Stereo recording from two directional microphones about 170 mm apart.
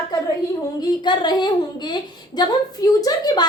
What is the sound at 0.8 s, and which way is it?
A woman's voice, 25° left (ahead or behind).